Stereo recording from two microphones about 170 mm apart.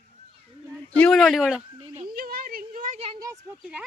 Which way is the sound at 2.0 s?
60° right (ahead or behind).